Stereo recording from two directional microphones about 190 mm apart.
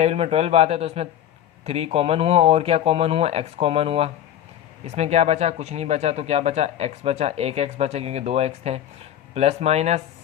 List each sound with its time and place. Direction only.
0.0 s speech: 35° right (ahead or behind)